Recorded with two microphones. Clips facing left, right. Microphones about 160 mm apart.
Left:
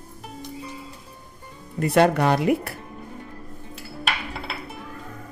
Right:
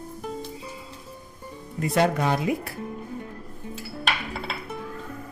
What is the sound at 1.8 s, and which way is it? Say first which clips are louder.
Speech: left 4 dB; 65° left (ahead or behind).